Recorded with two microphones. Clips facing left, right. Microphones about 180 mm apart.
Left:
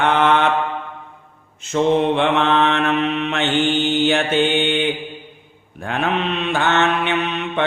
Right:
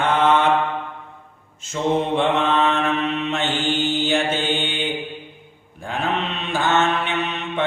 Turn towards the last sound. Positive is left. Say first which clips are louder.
# left 3 dB
turn(degrees=65)  # may be behind; listen again after turning